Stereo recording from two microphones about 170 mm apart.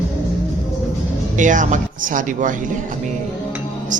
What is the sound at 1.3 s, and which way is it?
Speech, 50° right (ahead or behind).